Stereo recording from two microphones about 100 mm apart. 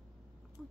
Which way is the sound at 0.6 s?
5° left (ahead or behind).